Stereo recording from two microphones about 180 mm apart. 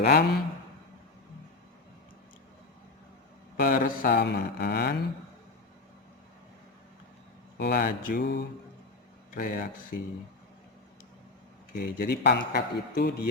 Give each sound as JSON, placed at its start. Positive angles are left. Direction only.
{"t": 0.0, "sound": "a man's voice", "side_deg": 60}
{"t": 3.6, "sound": "a man's voice", "side_deg": 50}
{"t": 7.6, "sound": "a man's voice", "side_deg": 50}
{"t": 9.3, "sound": "speech", "side_deg": 50}
{"t": 11.7, "sound": "a man's voice", "side_deg": 55}